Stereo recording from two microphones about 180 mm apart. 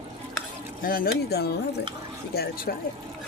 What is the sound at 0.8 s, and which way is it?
Speech, 55° left (ahead or behind).